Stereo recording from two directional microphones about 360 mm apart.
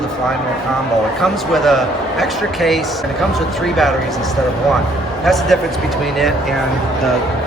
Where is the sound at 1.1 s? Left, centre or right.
Centre.